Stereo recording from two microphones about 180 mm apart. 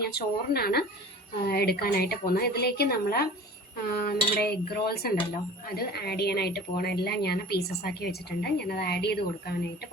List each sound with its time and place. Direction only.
0.1 s a woman's voice: 60° left (ahead or behind)